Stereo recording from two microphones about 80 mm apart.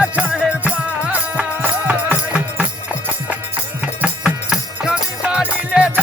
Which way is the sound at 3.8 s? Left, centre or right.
Centre.